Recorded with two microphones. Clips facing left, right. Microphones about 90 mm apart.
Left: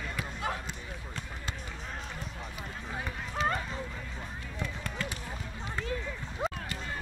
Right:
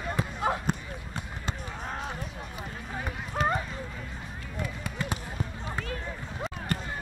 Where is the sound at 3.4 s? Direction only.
50° right (ahead or behind).